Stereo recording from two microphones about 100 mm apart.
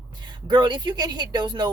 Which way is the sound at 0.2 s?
50° right (ahead or behind).